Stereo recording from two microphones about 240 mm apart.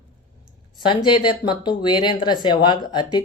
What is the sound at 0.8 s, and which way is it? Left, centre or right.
Speech, centre.